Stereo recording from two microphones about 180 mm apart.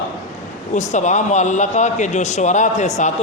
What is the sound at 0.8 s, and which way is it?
A man's voice, 40° left (ahead or behind).